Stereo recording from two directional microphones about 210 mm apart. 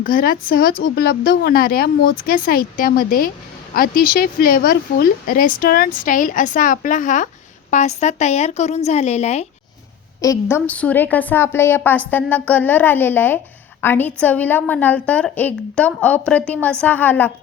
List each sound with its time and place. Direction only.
0.0 s speech: 45° left (ahead or behind)
10.2 s a woman's voice: 15° left (ahead or behind)